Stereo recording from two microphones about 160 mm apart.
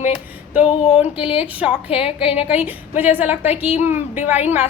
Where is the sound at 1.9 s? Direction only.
35° left (ahead or behind).